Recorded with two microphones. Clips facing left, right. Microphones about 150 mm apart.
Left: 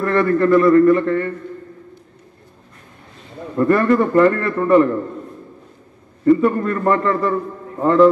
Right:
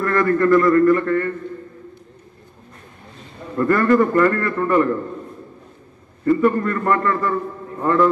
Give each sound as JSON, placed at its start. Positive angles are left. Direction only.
{"t": 0.0, "sound": "a man's voice", "side_deg": 25}
{"t": 3.5, "sound": "a man's voice", "side_deg": 20}
{"t": 6.2, "sound": "a man's voice", "side_deg": 20}